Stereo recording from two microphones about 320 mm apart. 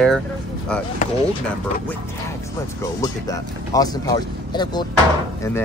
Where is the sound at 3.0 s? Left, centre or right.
Centre.